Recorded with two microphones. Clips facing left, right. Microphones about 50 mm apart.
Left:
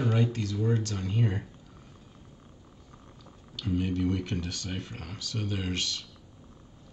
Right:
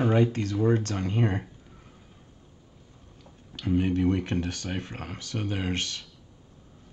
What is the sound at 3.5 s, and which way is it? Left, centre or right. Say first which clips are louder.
Speech: right 4 dB; right.